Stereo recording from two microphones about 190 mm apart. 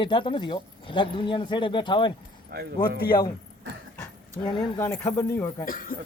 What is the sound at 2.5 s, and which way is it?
Speech, 55° right (ahead or behind).